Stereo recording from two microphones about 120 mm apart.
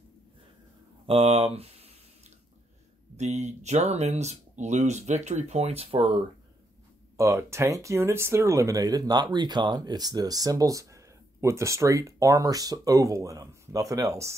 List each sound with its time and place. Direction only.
1.0 s a sound: 55° right (ahead or behind)
3.2 s speech: 70° right (ahead or behind); by 6.2 s 50° right (ahead or behind)
7.2 s speech: 20° right (ahead or behind)